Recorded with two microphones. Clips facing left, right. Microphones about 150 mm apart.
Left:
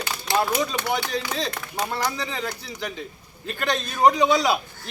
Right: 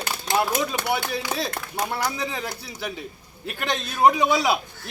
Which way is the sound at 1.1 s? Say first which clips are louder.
Even; 10° right (ahead or behind).